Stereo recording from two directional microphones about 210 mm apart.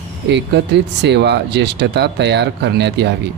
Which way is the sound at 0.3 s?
55° right (ahead or behind).